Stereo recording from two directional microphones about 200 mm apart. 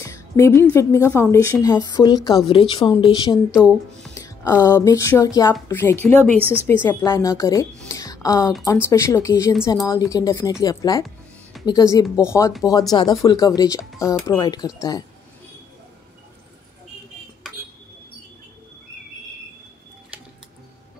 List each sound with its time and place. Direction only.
0.0 s a woman's voice: 15° left (ahead or behind)
4.1 s music: 15° left (ahead or behind)
4.6 s a woman's voice: 15° left (ahead or behind)
7.8 s music: 15° left (ahead or behind)
8.8 s a woman's voice: 15° left (ahead or behind)